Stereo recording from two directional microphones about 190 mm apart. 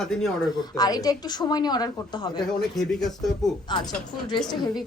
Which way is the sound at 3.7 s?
25° left (ahead or behind).